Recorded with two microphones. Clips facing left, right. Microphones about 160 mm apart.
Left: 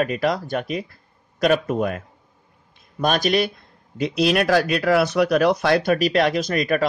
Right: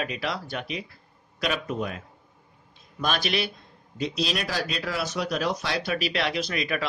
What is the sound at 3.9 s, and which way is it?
Speech, 60° left (ahead or behind).